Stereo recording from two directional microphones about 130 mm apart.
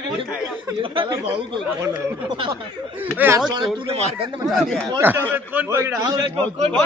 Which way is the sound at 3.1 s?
15° right (ahead or behind).